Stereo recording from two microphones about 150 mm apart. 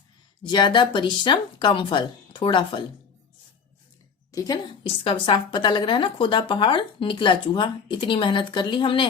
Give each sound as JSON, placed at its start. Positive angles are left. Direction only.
{"t": 0.4, "sound": "speech", "side_deg": 30}
{"t": 4.3, "sound": "a woman's voice", "side_deg": 25}
{"t": 5.0, "sound": "speech", "side_deg": 35}